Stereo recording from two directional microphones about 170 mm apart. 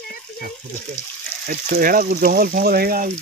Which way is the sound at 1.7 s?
60° right (ahead or behind).